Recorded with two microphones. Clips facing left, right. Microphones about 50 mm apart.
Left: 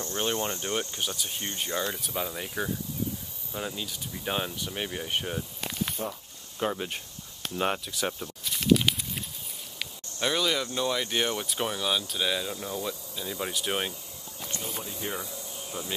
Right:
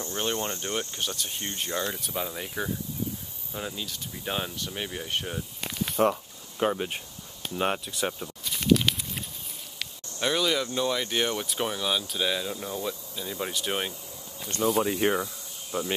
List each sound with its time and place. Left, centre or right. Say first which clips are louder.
0.0 s speech: even; centre
6.0 s speech: right 16 dB; right
6.7 s speech: right 3 dB; centre
7.4 s a sound: right 1 dB; centre
9.8 s speech: even; centre
14.8 s speech: right 13 dB; right
15.7 s insect: right 8 dB; right